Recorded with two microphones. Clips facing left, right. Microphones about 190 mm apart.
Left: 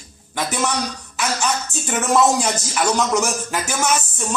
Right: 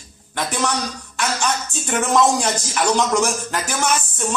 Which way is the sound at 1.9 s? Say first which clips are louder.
Even; 5° left (ahead or behind).